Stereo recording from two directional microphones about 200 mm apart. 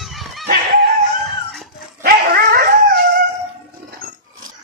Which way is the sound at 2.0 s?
50° right (ahead or behind).